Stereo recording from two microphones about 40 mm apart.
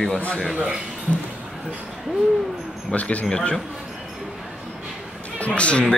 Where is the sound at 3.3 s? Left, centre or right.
Centre.